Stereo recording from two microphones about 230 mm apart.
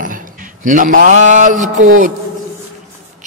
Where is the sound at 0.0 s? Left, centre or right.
Right.